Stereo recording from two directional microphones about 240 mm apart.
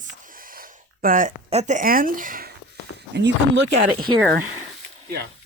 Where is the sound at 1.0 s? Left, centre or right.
Right.